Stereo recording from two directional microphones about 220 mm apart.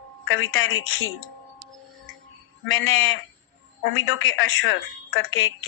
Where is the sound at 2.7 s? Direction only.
60° left (ahead or behind).